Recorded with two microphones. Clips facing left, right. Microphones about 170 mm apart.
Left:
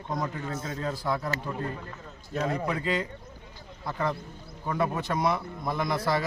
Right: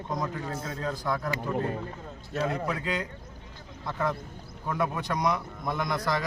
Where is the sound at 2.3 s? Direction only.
Centre (ahead or behind).